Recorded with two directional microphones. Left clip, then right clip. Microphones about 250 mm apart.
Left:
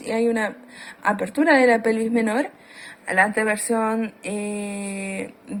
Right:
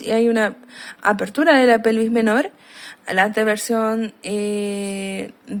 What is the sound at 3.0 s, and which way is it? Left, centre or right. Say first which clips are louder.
Speech: right 2 dB; right.